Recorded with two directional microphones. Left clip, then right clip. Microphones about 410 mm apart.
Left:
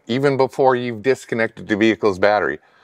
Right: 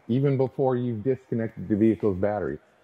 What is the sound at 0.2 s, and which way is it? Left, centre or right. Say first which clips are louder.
Speech: left 9 dB; centre.